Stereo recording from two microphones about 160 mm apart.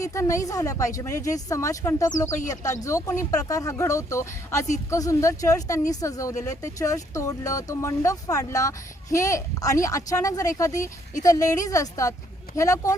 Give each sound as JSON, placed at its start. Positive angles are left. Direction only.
{"t": 0.0, "sound": "a woman's voice", "side_deg": 20}